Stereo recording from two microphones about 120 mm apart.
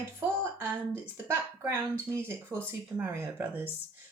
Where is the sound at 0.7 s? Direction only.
15° right (ahead or behind).